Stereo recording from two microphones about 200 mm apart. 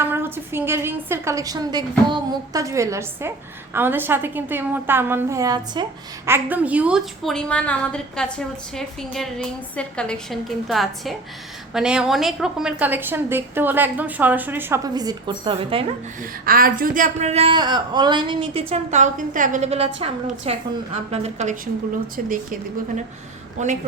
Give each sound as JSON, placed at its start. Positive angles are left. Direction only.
{"t": 0.0, "sound": "a woman's voice", "side_deg": -10}
{"t": 16.5, "sound": "speech", "side_deg": -45}
{"t": 23.6, "sound": "speech", "side_deg": -35}